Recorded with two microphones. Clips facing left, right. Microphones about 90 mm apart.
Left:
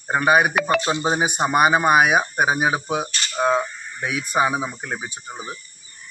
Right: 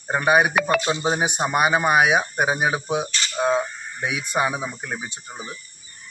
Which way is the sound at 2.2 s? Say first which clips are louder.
Left 2 dB; 20° left (ahead or behind).